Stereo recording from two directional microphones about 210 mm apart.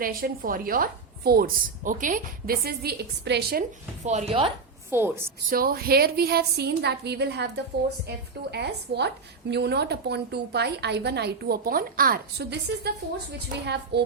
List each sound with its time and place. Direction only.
0.0 s a woman's voice: 45° right (ahead or behind)
4.0 s speech: 35° right (ahead or behind)
4.9 s a woman's voice: 10° right (ahead or behind)
5.5 s a woman's voice: 45° right (ahead or behind)
13.9 s a woman's voice: 50° right (ahead or behind)